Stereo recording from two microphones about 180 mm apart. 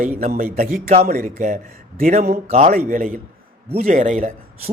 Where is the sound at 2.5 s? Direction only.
35° right (ahead or behind).